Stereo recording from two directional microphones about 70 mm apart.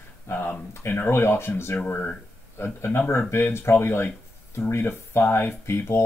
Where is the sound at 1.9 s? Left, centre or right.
Left.